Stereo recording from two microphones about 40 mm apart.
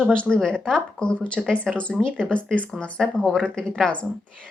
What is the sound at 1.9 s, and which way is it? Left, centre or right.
Speech, centre.